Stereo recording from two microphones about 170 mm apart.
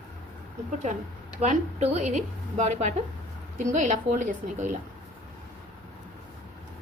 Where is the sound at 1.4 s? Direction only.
40° right (ahead or behind).